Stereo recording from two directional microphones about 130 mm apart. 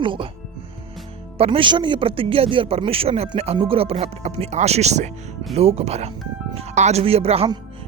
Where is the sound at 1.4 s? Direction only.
45° right (ahead or behind).